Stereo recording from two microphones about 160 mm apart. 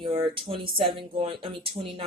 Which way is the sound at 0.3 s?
35° right (ahead or behind).